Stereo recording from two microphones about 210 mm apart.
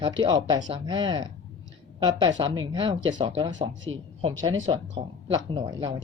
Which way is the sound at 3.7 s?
65° right (ahead or behind).